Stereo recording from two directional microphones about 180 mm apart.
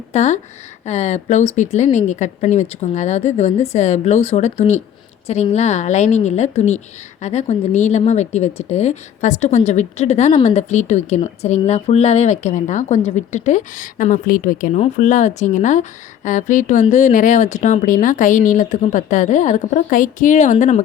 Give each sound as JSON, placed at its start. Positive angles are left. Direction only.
{"t": 0.1, "sound": "speech", "side_deg": 40}